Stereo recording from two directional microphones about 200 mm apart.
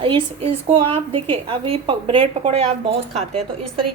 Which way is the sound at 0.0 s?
25° right (ahead or behind).